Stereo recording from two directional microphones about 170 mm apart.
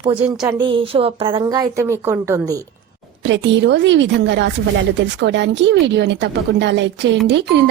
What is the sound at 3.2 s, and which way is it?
A woman's voice, 90° right.